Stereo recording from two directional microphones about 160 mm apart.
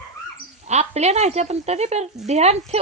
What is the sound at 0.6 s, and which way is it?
Speech, 45° right (ahead or behind).